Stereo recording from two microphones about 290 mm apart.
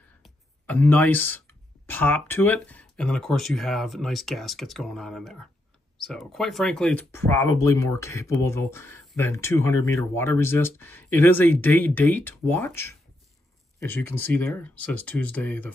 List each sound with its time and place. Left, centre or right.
0.2 s speech: centre